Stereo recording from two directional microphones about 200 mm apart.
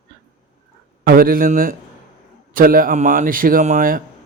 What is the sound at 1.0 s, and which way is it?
A man's voice, 45° right (ahead or behind).